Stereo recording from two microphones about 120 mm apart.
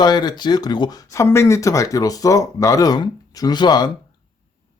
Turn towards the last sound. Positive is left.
turn(degrees=35)  # may be behind; listen again after turning